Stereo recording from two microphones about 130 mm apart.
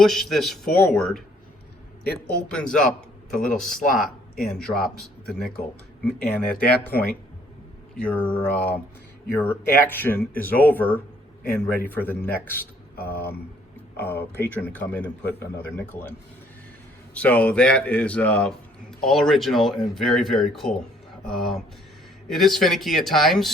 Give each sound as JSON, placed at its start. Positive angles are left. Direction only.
{"t": 0.0, "sound": "speech", "side_deg": 0}
{"t": 2.3, "sound": "speech", "side_deg": 5}
{"t": 7.9, "sound": "speech", "side_deg": 10}
{"t": 17.2, "sound": "speech", "side_deg": 10}